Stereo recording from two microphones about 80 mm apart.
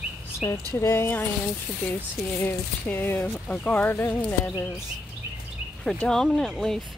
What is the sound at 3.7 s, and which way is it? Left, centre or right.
Speech, left.